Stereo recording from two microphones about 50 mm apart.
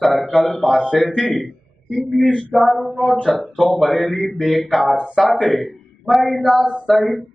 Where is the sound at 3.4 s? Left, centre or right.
Centre.